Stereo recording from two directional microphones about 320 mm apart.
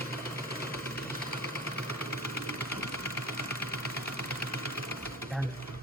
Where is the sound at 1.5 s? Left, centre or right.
Centre.